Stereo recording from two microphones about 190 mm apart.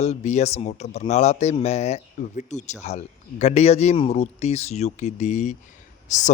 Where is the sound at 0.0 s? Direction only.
35° left (ahead or behind).